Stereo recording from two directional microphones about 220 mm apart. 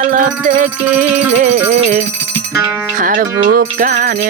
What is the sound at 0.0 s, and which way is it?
Music, 40° right (ahead or behind).